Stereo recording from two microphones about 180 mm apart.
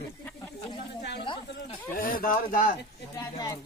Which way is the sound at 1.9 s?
55° left (ahead or behind).